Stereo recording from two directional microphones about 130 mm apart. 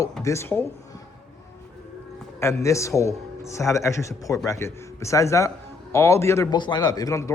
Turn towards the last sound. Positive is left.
turn(degrees=25)  # may be behind; listen again after turning